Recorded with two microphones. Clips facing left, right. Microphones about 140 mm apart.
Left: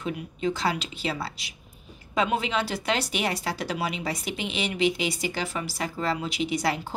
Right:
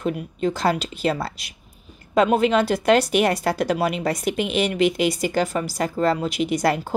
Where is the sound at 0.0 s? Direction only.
45° right (ahead or behind).